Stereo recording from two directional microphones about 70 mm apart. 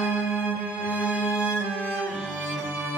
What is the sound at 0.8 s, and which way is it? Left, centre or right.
Music, centre.